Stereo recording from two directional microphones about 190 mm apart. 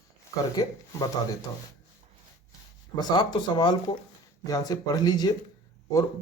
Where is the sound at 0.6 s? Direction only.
20° left (ahead or behind).